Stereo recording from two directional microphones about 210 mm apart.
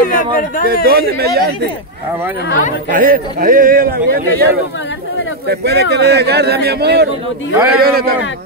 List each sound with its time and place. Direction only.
0.0 s speech: 40° left (ahead or behind)
0.8 s a man's voice: 45° right (ahead or behind)
2.9 s a man's voice: 40° right (ahead or behind)
5.5 s a man's voice: 50° right (ahead or behind)